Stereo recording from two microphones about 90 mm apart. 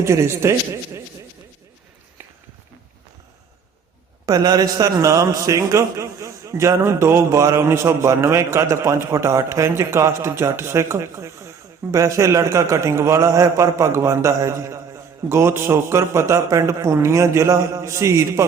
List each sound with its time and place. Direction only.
0.0 s a man's voice: 30° right (ahead or behind)
4.3 s a man's voice: 45° right (ahead or behind)